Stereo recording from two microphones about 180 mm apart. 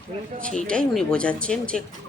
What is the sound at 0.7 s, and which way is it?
Speech, 5° left (ahead or behind).